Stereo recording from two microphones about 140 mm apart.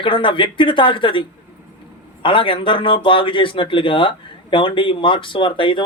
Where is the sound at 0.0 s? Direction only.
35° left (ahead or behind).